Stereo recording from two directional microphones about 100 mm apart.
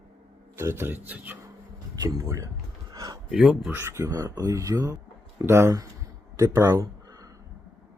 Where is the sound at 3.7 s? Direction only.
25° right (ahead or behind).